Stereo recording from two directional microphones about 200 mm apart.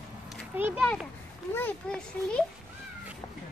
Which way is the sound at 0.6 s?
10° right (ahead or behind).